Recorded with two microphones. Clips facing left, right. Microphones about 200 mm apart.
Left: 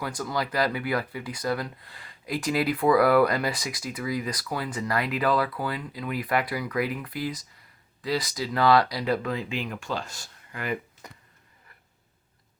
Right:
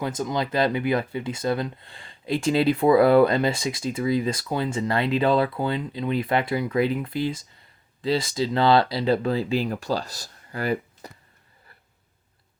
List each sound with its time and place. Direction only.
0.0 s speech: 20° right (ahead or behind)